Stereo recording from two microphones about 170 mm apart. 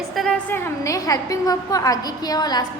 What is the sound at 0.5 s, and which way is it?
A woman's voice, 15° left (ahead or behind).